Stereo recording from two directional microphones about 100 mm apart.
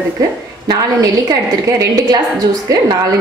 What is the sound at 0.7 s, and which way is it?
A woman's voice, 45° right (ahead or behind).